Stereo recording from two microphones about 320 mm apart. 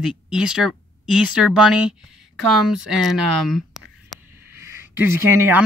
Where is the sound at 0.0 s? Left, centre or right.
Centre.